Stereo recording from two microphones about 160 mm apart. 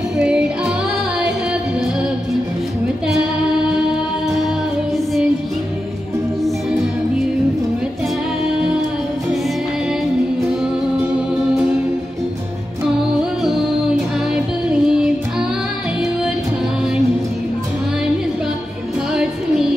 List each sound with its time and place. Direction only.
0.2 s music: 5° right (ahead or behind)
12.8 s music: 5° right (ahead or behind)